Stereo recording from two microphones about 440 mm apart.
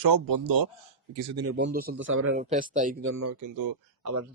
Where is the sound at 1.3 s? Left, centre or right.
Right.